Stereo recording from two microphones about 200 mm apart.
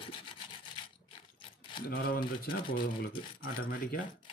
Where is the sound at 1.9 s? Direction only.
45° left (ahead or behind).